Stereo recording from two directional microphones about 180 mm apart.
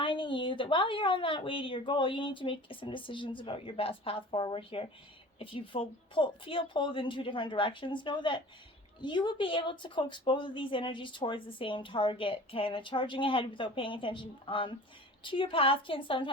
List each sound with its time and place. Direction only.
0.0 s a woman's voice: 30° left (ahead or behind)